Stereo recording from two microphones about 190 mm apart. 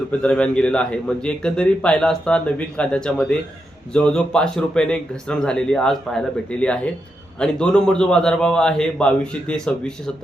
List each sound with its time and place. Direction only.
0.1 s a man's voice: 5° left (ahead or behind)